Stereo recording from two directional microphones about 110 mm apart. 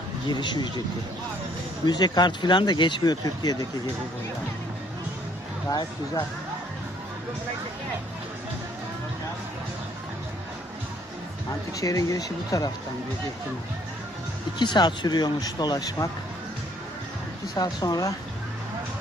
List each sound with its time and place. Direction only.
0.3 s speech: 45° left (ahead or behind)
1.8 s speech: 40° left (ahead or behind)
5.6 s speech: 35° left (ahead or behind)
11.8 s speech: 30° left (ahead or behind)
14.6 s speech: 40° left (ahead or behind)
17.5 s speech: 35° left (ahead or behind)